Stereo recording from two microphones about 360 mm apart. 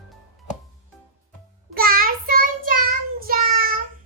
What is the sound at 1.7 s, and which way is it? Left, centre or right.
Child singing, right.